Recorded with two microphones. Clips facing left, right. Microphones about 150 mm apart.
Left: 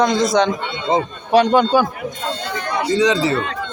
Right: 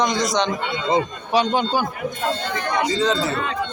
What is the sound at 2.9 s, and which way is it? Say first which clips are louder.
Speech: left 4 dB; 90° left.